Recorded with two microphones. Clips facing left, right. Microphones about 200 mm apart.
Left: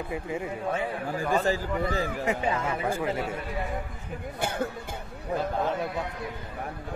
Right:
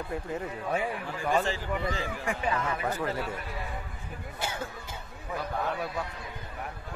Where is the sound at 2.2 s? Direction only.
25° left (ahead or behind).